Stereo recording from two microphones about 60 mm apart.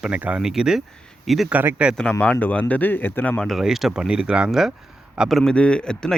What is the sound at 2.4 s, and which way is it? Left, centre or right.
Speech, left.